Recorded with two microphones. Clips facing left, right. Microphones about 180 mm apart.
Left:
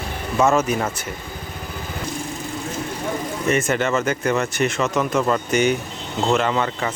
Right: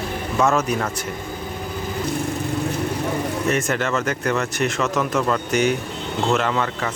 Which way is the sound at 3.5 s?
Centre (ahead or behind).